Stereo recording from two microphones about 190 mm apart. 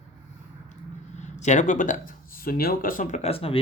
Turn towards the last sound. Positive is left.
turn(degrees=30)  # may be behind; listen again after turning